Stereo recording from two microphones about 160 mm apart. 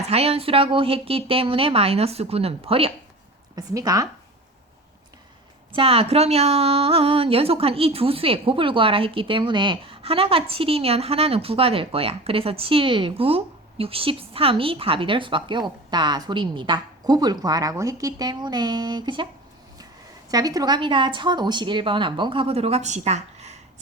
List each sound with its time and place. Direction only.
0.1 s a woman's voice: 40° right (ahead or behind)
3.5 s speech: 20° right (ahead or behind)
5.7 s a woman's voice: 35° right (ahead or behind)
20.3 s a woman's voice: 25° right (ahead or behind); by 23.6 s 45° right (ahead or behind)